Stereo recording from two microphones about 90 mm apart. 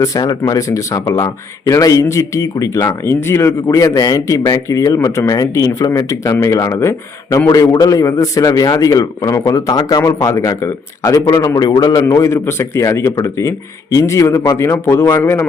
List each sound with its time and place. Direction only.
0.0 s speech: 45° left (ahead or behind)
3.8 s speech: 45° left (ahead or behind)
12.0 s a man's voice: 35° left (ahead or behind)